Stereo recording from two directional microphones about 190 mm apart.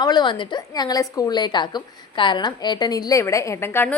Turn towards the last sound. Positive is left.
turn(degrees=10)  # may be behind; listen again after turning